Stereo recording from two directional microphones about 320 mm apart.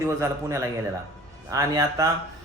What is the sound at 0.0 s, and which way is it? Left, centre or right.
A man's voice, centre.